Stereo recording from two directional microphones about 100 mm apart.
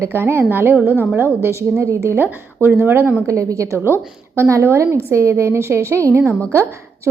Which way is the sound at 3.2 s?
35° right (ahead or behind).